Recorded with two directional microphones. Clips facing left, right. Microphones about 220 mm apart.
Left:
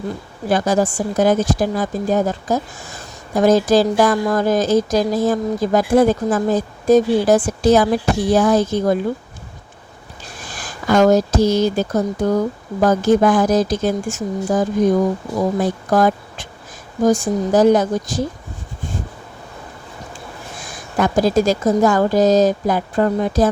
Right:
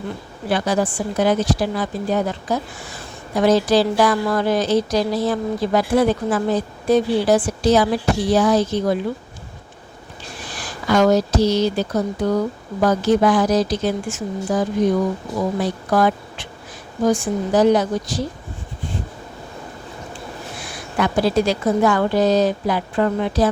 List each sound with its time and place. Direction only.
0.4 s a woman's voice: 45° left (ahead or behind)
10.4 s a woman's voice: 45° left (ahead or behind)
20.6 s a woman's voice: 45° left (ahead or behind)